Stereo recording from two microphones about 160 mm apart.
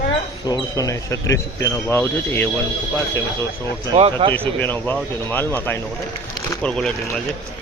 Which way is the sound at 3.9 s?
35° right (ahead or behind).